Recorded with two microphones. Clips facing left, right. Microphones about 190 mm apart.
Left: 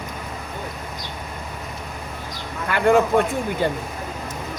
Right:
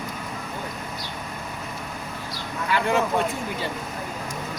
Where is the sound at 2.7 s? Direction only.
55° left (ahead or behind).